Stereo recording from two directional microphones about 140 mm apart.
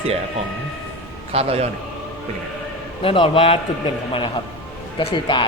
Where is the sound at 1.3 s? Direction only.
45° right (ahead or behind).